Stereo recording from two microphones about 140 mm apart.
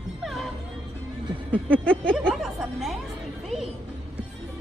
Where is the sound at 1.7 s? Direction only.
10° left (ahead or behind).